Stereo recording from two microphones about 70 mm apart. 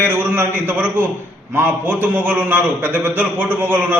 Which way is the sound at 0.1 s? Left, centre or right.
Right.